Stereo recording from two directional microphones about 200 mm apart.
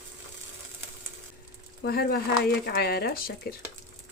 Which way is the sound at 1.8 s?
50° left (ahead or behind).